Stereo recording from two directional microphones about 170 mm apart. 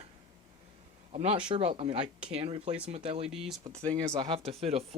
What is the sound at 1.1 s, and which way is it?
Speech, 35° right (ahead or behind).